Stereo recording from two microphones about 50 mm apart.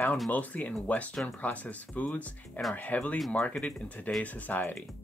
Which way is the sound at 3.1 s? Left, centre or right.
Centre.